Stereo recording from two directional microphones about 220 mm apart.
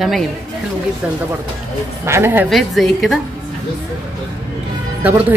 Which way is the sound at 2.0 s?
10° right (ahead or behind).